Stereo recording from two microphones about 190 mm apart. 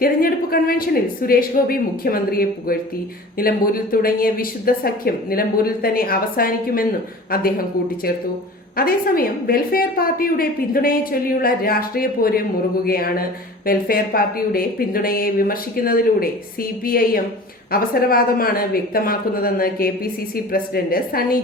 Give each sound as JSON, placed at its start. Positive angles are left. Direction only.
{"t": 0.0, "sound": "a woman's voice", "side_deg": 50}
{"t": 8.7, "sound": "a woman's voice", "side_deg": 50}